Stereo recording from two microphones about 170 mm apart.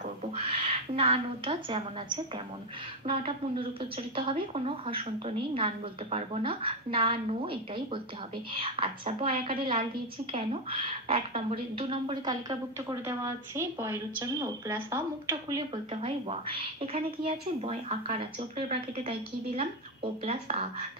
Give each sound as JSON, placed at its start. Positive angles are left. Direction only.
{"t": 0.4, "sound": "a woman's voice", "side_deg": -35}
{"t": 15.9, "sound": "a woman's voice", "side_deg": -35}